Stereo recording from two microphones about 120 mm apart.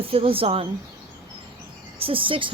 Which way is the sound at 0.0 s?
50° right (ahead or behind).